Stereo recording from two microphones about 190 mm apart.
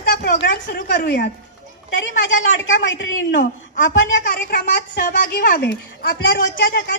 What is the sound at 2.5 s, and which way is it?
Speech, 80° left.